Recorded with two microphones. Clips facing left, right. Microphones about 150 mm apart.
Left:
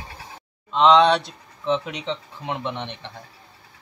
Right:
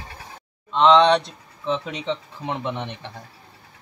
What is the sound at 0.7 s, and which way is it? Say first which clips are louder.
Speech: even; centre (ahead or behind).